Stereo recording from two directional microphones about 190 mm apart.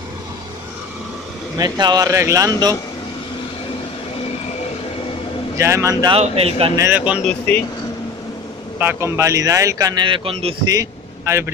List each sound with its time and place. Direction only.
1.6 s speech: 20° right (ahead or behind)
5.6 s speech: 15° right (ahead or behind)
6.1 s speech: 30° right (ahead or behind)
6.8 s speech: 10° right (ahead or behind)
7.2 s speech: 10° left (ahead or behind)
8.7 s a man's voice: 10° right (ahead or behind); by 10.7 s 30° right (ahead or behind)
10.7 s a man's voice: 15° right (ahead or behind)